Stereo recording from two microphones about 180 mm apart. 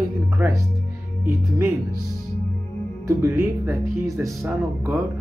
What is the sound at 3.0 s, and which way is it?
Speech, 15° right (ahead or behind).